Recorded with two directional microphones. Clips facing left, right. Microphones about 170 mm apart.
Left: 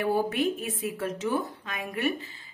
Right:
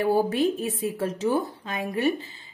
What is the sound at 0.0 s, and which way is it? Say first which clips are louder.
A woman's voice: right 4 dB; 30° right (ahead or behind).